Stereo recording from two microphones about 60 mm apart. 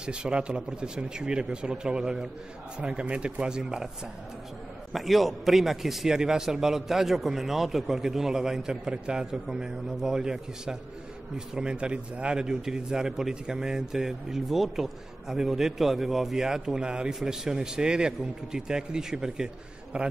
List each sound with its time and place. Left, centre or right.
0.0 s speech: centre
4.9 s speech: centre